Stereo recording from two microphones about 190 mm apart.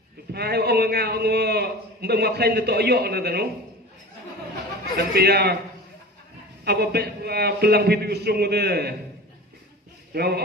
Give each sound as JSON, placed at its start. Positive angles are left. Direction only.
{"t": 0.3, "sound": "a man's voice", "side_deg": -60}
{"t": 4.9, "sound": "a man's voice", "side_deg": -60}
{"t": 6.6, "sound": "a man's voice", "side_deg": -55}
{"t": 10.1, "sound": "a man's voice", "side_deg": -55}